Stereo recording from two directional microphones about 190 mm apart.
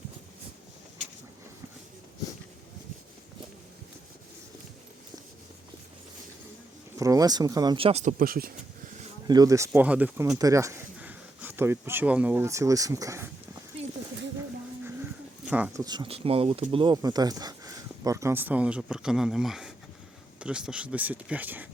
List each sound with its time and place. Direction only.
6.9 s speech: 15° right (ahead or behind)
8.2 s speech: 50° right (ahead or behind)
9.2 s speech: 20° right (ahead or behind)
15.4 s speech: 5° right (ahead or behind)
15.8 s speech: 20° right (ahead or behind)